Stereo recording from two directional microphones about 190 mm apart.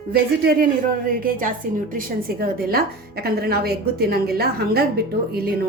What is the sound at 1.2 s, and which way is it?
A woman's voice, 45° right (ahead or behind).